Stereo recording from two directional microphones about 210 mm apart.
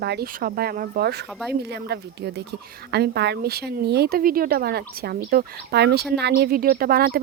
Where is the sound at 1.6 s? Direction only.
50° right (ahead or behind).